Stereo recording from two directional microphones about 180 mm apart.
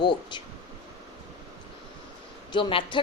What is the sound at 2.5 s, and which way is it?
Speech, 30° left (ahead or behind).